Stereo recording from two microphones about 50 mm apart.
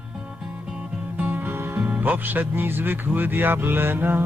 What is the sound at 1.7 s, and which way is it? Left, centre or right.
A man's voice, right.